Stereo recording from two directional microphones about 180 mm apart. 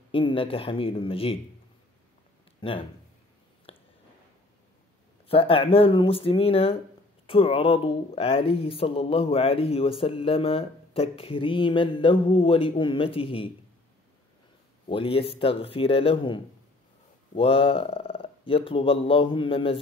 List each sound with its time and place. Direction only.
0.1 s speech: 30° left (ahead or behind)
2.6 s speech: 30° left (ahead or behind)
3.7 s a sound: 30° left (ahead or behind)
5.3 s speech: 30° left (ahead or behind)
14.9 s speech: 30° left (ahead or behind)
17.4 s speech: 30° left (ahead or behind)